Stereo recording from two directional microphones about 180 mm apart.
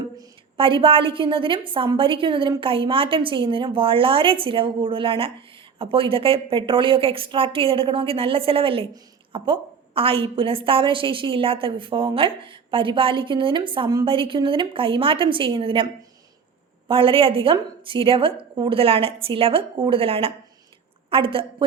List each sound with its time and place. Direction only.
0.2 s a woman's voice: 30° right (ahead or behind)
16.9 s a woman's voice: 30° right (ahead or behind)